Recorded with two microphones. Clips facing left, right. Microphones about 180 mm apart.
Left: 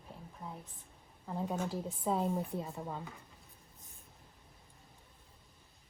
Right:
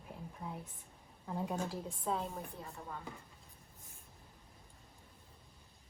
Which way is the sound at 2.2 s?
15° left (ahead or behind).